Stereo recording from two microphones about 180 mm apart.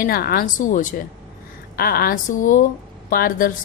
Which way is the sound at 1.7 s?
55° left (ahead or behind).